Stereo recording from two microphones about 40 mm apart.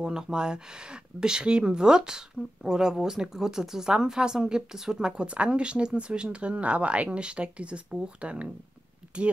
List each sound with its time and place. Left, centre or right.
0.0 s speech: centre